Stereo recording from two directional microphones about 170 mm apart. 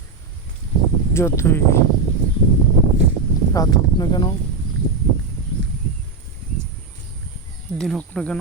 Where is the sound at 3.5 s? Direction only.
20° left (ahead or behind).